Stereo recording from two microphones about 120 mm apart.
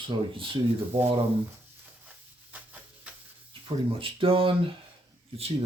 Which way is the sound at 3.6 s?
50° right (ahead or behind).